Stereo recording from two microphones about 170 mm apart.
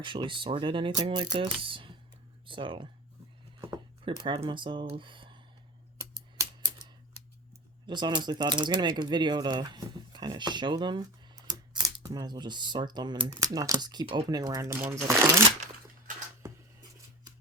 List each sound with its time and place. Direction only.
0.0 s speech: 30° right (ahead or behind)
6.3 s typing: 20° right (ahead or behind)
7.9 s speech: 25° right (ahead or behind)